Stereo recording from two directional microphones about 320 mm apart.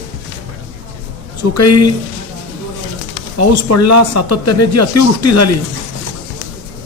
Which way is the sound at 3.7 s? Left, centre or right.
Left.